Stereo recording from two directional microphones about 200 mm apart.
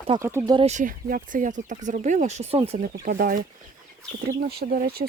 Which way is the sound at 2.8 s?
45° right (ahead or behind).